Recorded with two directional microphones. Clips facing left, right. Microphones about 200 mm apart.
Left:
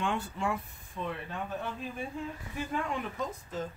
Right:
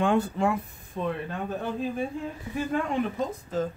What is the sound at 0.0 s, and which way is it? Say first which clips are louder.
Speech: right 9 dB; 45° right (ahead or behind).